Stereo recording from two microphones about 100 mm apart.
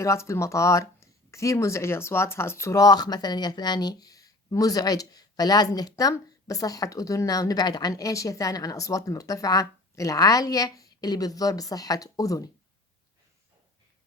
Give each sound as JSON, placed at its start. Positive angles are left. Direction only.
{"t": 0.0, "sound": "speech", "side_deg": 30}
{"t": 2.8, "sound": "speech", "side_deg": 45}